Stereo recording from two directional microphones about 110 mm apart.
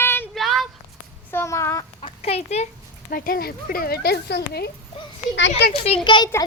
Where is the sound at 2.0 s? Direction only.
65° left (ahead or behind).